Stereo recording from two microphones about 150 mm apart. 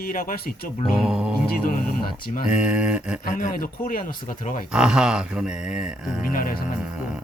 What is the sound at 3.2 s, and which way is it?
Speech, 65° left (ahead or behind).